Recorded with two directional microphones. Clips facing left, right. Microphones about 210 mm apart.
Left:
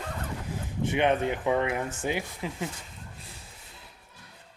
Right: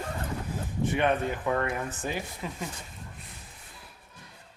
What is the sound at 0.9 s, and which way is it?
Speech, 20° left (ahead or behind).